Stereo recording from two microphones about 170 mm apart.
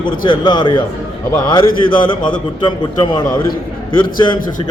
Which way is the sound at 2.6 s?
30° left (ahead or behind).